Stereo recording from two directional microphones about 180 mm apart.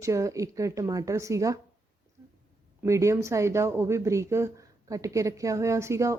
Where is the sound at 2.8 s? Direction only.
15° right (ahead or behind).